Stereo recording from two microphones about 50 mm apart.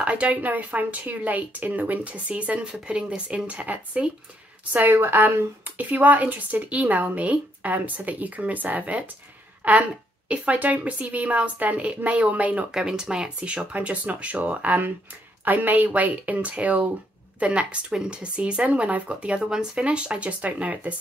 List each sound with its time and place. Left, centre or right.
0.0 s a woman's voice: right
2.7 s speech: centre
3.3 s a woman's voice: right
4.7 s a woman's voice: right
12.7 s a woman's voice: centre; by 16.9 s right
17.4 s a woman's voice: right